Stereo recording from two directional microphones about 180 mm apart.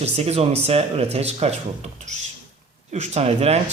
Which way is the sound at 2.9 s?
40° right (ahead or behind).